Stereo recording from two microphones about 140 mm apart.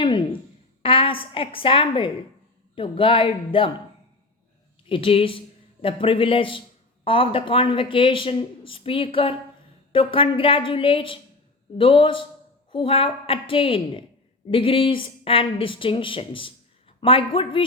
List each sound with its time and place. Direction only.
0.8 s speech: 40° left (ahead or behind)
4.9 s speech: 40° left (ahead or behind)